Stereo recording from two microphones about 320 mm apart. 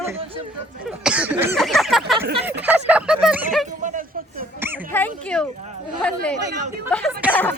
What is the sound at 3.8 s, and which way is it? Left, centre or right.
Speech, right.